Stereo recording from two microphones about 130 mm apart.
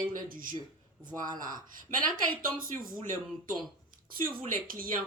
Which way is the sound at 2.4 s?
90° right.